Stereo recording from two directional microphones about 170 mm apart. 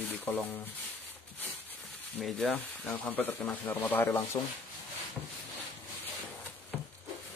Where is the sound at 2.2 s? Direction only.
Centre (ahead or behind).